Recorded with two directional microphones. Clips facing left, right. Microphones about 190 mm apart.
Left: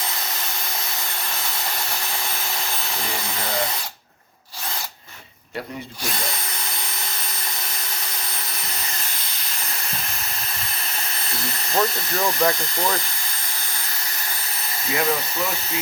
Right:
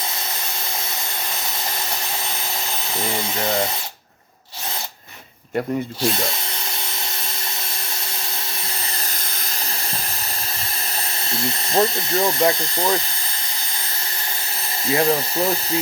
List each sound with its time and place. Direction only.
11.7 s speech: 30° right (ahead or behind)
14.8 s speech: 30° right (ahead or behind)